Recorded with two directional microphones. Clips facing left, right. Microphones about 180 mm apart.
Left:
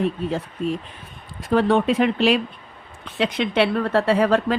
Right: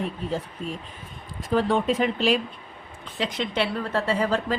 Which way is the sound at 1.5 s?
70° left (ahead or behind).